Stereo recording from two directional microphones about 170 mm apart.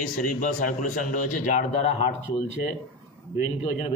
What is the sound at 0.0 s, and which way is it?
A man's voice, 55° left (ahead or behind).